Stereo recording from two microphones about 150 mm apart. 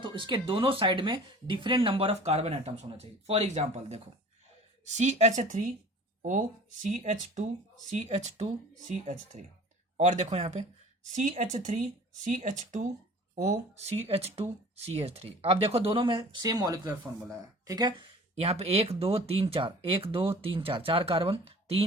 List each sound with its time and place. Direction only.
0.0 s a woman's voice: 35° right (ahead or behind); by 5.7 s 60° right (ahead or behind)
6.8 s a woman's voice: 50° right (ahead or behind)